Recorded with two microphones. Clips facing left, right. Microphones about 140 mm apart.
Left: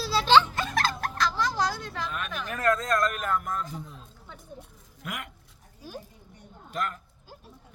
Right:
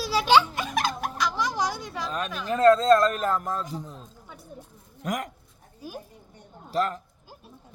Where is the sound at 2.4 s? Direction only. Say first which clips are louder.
Right 10 dB; 25° right (ahead or behind).